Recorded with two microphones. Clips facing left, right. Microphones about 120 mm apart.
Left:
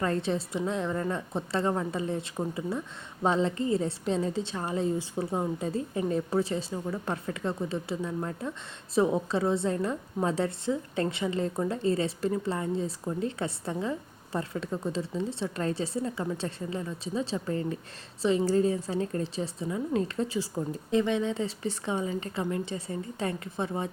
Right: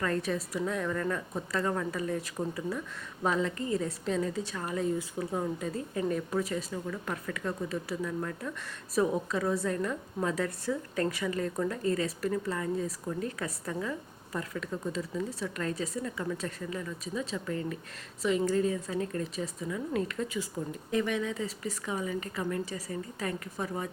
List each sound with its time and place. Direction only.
0.0 s a woman's voice: 30° left (ahead or behind)